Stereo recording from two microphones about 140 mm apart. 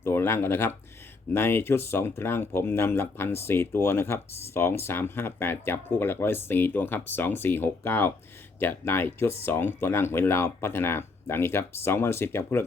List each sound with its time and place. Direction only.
0.0 s speech: 15° left (ahead or behind)